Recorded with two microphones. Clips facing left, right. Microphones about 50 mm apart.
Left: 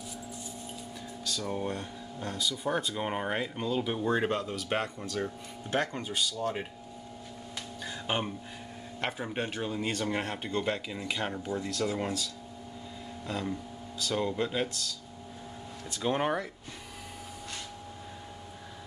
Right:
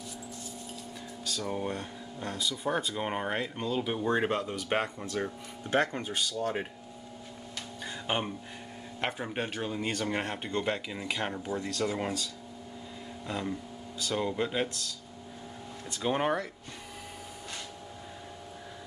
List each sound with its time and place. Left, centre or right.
1.2 s speech: centre
5.7 s speech: right
7.8 s music: centre
9.0 s speech: centre
13.3 s speech: centre